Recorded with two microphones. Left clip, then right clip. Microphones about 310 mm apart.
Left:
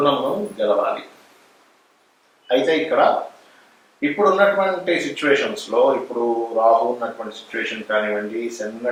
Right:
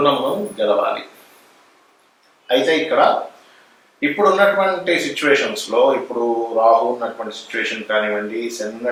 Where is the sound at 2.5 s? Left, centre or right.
Centre.